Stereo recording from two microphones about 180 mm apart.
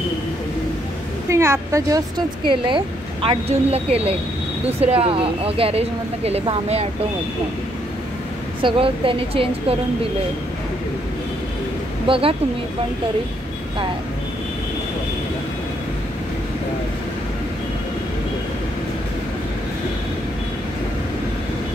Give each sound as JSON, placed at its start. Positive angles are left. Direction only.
{"t": 1.3, "sound": "speech", "side_deg": -15}
{"t": 8.6, "sound": "speech", "side_deg": -30}
{"t": 12.1, "sound": "speech", "side_deg": -30}